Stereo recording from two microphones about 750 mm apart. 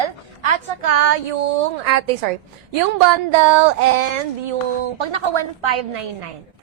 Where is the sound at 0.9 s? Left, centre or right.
Right.